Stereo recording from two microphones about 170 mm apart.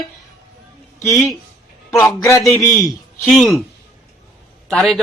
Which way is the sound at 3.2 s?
Centre (ahead or behind).